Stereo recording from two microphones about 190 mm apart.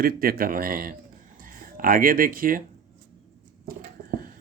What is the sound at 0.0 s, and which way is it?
Speech, 50° right (ahead or behind).